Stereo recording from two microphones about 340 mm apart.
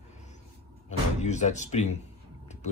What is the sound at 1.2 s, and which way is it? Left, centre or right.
Speech, left.